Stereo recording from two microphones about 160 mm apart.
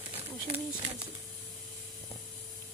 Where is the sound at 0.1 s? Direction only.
35° right (ahead or behind).